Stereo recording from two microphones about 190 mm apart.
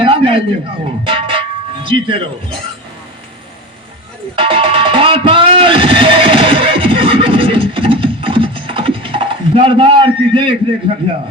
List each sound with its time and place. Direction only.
0.0 s a sound: 30° right (ahead or behind)
1.0 s music: 25° right (ahead or behind)
4.4 s music: 30° right (ahead or behind)